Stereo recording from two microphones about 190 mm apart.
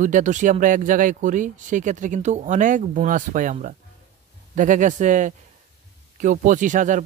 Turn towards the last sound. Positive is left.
turn(degrees=-40)  # may be behind; listen again after turning